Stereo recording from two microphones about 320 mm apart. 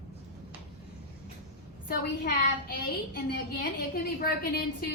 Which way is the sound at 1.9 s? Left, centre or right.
Left.